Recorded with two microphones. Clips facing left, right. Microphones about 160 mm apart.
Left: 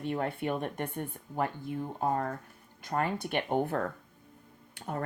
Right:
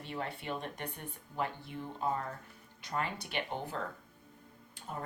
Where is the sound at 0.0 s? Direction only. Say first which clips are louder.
Left 8 dB; 50° left (ahead or behind).